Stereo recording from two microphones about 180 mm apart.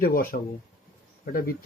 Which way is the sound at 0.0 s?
55° left (ahead or behind).